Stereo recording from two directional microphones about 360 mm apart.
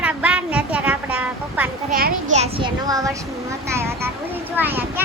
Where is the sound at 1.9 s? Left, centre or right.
Right.